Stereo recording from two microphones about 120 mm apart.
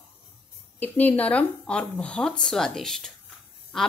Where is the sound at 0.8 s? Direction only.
15° left (ahead or behind).